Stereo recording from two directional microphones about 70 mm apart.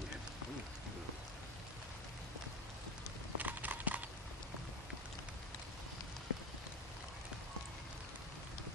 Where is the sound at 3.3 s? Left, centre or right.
Right.